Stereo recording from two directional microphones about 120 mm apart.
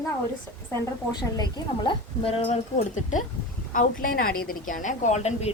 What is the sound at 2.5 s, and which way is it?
Speech, 90° left.